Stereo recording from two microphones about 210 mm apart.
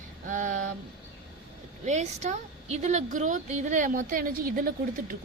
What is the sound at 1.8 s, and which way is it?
A woman's voice, 35° right (ahead or behind).